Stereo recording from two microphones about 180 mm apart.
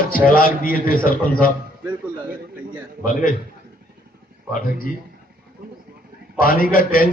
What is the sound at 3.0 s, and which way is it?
Speech, 50° left (ahead or behind).